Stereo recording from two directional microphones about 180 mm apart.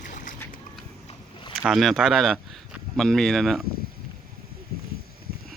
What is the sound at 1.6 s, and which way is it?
Speech, centre (ahead or behind).